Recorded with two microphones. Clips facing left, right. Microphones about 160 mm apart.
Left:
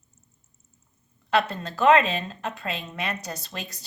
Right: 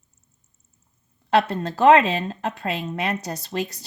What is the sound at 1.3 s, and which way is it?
A woman's voice, 35° right (ahead or behind).